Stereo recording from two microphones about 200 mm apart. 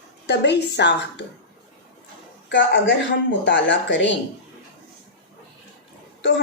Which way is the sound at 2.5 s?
65° left (ahead or behind).